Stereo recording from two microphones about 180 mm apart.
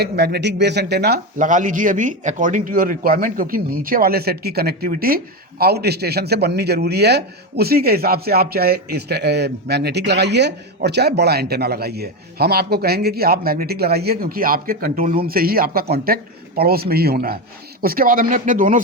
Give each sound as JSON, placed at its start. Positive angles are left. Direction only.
{"t": 0.0, "sound": "speech", "side_deg": -65}
{"t": 1.4, "sound": "speech", "side_deg": -45}